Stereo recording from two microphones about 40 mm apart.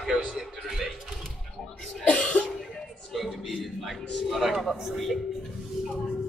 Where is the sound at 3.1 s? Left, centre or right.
Centre.